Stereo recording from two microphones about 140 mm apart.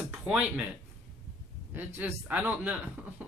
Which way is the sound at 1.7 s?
15° right (ahead or behind).